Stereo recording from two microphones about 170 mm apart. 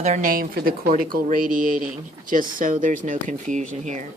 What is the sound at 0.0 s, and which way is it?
Speech, 45° right (ahead or behind).